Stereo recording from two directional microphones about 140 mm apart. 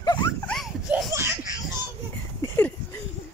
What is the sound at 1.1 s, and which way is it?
Laughter, 20° right (ahead or behind).